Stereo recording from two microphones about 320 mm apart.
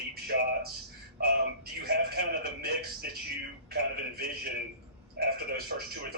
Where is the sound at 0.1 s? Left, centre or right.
Right.